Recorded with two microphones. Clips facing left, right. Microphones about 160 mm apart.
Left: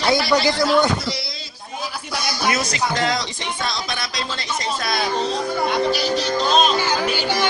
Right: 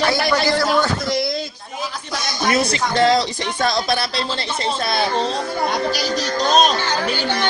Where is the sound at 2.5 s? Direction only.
30° right (ahead or behind).